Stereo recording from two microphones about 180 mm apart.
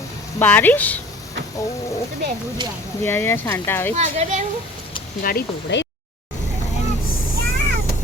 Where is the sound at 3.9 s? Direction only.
40° right (ahead or behind).